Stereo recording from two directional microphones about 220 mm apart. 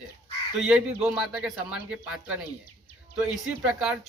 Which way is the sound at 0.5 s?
5° right (ahead or behind).